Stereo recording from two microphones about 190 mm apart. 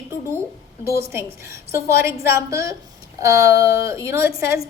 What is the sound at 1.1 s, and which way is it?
A woman's voice, 15° right (ahead or behind).